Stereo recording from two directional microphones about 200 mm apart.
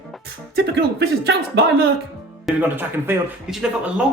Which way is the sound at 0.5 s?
55° right (ahead or behind).